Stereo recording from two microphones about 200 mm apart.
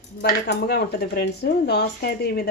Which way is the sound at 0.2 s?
55° left (ahead or behind).